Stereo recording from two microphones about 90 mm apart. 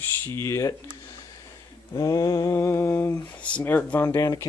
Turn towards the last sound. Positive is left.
turn(degrees=35)  # may be behind; listen again after turning